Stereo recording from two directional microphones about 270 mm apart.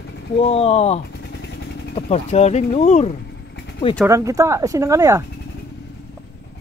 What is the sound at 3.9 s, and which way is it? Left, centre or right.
Speech, centre.